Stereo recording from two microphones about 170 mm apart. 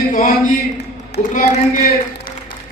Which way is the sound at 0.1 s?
50° left (ahead or behind).